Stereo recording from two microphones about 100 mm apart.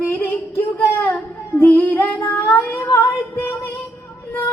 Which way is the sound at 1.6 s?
20° left (ahead or behind).